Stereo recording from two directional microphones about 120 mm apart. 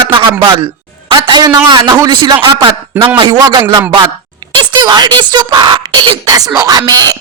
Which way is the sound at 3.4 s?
30° right (ahead or behind).